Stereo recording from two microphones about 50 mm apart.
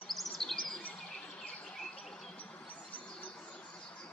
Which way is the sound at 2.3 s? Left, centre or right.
Left.